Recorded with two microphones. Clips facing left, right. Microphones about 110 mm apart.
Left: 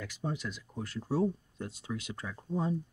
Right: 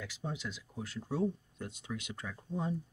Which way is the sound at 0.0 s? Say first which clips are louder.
Left 4 dB; 45° left (ahead or behind).